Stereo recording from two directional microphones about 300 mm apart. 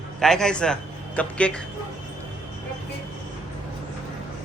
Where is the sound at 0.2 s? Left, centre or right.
Centre.